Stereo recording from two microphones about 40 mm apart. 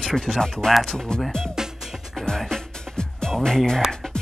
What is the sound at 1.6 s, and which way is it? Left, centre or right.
Music, centre.